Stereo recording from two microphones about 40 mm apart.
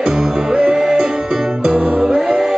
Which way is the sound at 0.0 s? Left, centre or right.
Centre.